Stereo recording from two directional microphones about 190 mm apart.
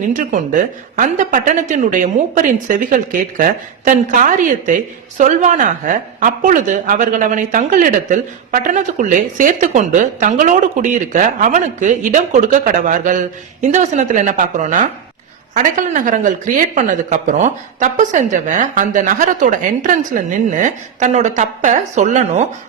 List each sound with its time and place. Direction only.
0.1 s a woman's voice: 45° right (ahead or behind)